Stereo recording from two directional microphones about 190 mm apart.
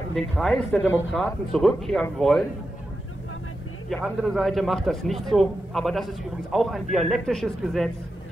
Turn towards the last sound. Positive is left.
turn(degrees=0)  # may be behind; listen again after turning